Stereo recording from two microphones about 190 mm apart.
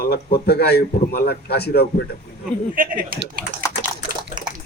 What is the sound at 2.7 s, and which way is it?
Speech, 45° right (ahead or behind).